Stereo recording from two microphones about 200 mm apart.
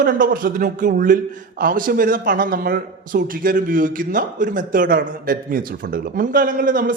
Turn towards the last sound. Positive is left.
turn(degrees=-45)  # may be behind; listen again after turning